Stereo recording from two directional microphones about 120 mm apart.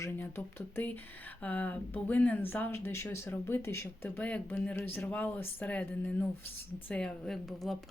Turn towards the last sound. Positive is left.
turn(degrees=0)  # may be behind; listen again after turning